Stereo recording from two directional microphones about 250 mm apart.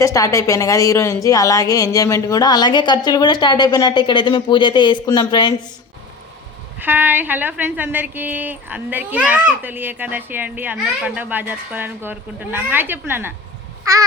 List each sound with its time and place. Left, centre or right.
0.0 s a woman's voice: centre
6.7 s a woman's voice: centre
13.9 s crow: centre